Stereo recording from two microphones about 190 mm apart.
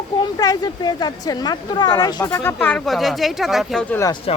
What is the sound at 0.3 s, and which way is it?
Speech, 20° left (ahead or behind).